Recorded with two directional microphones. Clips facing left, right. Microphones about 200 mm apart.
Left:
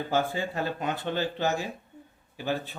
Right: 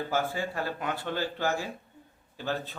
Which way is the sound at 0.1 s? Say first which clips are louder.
Left 5 dB; 20° left (ahead or behind).